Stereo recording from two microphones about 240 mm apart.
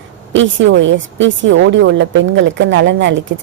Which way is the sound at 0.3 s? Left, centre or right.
Right.